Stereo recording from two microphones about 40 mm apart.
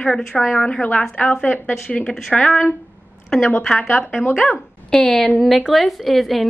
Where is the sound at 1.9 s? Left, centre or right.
Centre.